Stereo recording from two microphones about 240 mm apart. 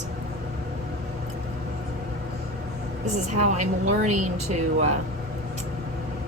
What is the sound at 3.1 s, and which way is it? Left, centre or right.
A woman's voice, right.